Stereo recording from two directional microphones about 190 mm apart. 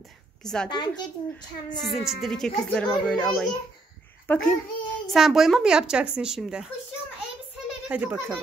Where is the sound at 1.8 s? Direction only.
Centre (ahead or behind).